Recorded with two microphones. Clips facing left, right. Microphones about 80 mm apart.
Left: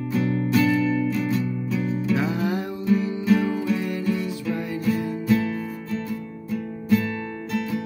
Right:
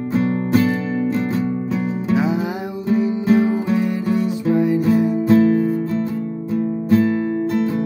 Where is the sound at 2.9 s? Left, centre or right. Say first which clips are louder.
Right 4 dB; right.